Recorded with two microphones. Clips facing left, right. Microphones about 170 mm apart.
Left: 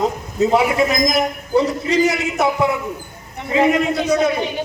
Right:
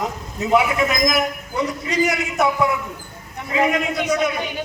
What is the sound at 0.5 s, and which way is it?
A man's voice, 30° left (ahead or behind).